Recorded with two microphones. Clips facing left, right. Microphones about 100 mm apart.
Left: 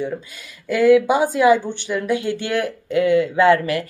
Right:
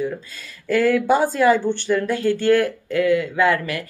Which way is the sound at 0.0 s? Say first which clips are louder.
Even; 15° left (ahead or behind).